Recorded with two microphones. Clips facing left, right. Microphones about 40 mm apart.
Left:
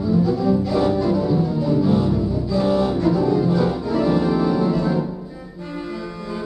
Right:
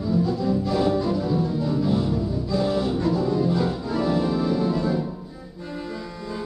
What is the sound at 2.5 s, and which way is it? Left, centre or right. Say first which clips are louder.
Organ: left 4 dB; centre.